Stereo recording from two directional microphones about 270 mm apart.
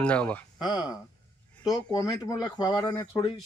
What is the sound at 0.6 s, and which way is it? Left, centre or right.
Speech, centre.